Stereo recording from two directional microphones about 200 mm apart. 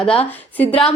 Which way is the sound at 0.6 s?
5° left (ahead or behind).